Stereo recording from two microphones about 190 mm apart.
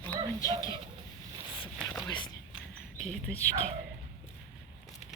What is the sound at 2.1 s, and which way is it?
Speech, 25° left (ahead or behind).